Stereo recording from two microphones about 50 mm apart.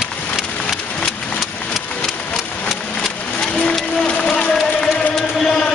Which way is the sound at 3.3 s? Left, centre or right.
Left.